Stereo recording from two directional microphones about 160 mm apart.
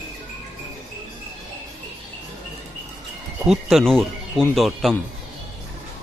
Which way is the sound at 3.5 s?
Centre (ahead or behind).